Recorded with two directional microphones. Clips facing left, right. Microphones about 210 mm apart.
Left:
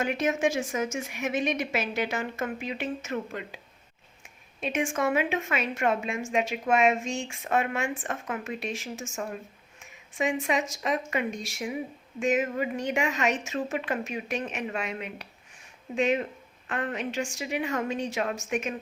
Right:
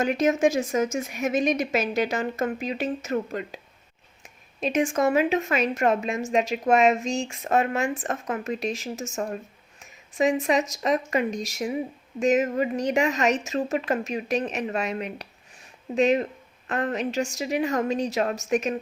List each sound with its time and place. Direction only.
0.0 s speech: 40° right (ahead or behind)